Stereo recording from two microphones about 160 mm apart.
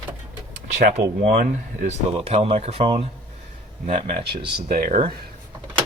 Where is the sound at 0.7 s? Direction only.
45° right (ahead or behind).